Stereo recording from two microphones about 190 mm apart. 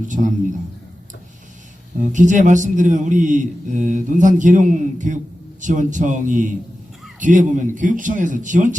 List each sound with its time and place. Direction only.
2.0 s a man's voice: 40° right (ahead or behind)